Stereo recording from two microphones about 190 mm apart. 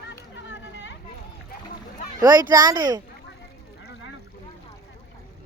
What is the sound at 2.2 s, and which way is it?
Speech, 20° right (ahead or behind).